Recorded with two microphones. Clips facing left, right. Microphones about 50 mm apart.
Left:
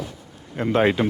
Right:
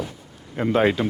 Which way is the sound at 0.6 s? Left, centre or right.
Centre.